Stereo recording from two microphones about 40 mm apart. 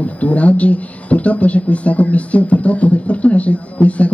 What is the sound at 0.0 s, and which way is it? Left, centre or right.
Speech, left.